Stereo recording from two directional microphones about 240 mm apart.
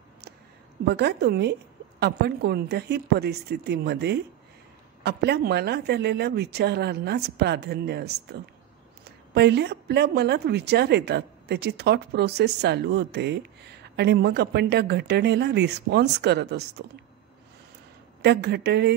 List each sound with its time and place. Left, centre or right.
0.8 s a woman's voice: right
18.2 s a woman's voice: right